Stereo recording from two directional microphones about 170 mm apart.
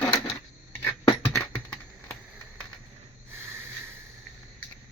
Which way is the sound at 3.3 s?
15° right (ahead or behind).